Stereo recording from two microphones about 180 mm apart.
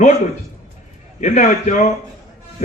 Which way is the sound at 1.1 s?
40° left (ahead or behind).